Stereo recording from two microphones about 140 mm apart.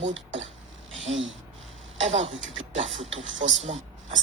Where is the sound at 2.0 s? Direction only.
45° right (ahead or behind).